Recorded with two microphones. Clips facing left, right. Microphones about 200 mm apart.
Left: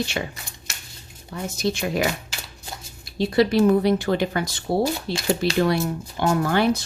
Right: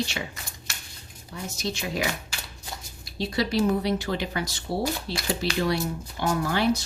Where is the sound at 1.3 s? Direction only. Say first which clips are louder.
Left 7 dB; 55° left (ahead or behind).